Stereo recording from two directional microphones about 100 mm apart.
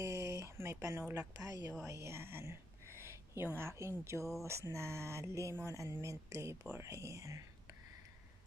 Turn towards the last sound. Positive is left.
turn(degrees=-30)  # may be behind; listen again after turning